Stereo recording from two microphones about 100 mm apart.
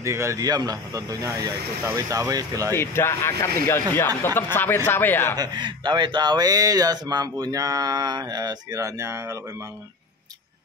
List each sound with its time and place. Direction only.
0.0 s speech: 30° right (ahead or behind)
2.7 s speech: 25° left (ahead or behind)
5.3 s speech: 45° right (ahead or behind)